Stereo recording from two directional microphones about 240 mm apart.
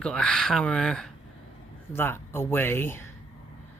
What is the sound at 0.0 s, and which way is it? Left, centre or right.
Speech, centre.